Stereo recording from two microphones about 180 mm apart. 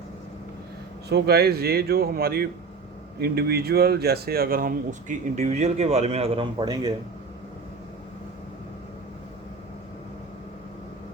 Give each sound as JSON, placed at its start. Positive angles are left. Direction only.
{"t": 1.1, "sound": "speech", "side_deg": -65}